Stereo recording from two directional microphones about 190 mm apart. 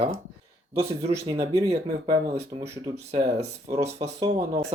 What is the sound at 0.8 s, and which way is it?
Speech, 35° right (ahead or behind).